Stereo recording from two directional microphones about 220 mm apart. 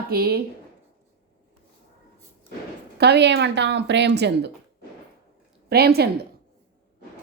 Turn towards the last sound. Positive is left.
turn(degrees=-45)  # may be behind; listen again after turning